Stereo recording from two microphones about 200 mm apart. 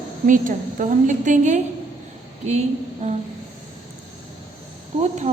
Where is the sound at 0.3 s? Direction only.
40° right (ahead or behind).